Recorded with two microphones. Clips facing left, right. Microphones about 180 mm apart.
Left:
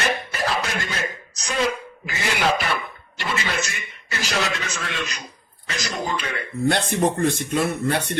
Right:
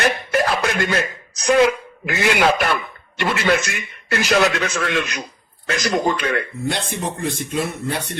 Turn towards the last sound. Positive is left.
turn(degrees=55)  # may be behind; listen again after turning